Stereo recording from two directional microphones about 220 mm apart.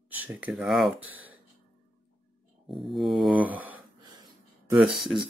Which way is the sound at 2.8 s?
Centre (ahead or behind).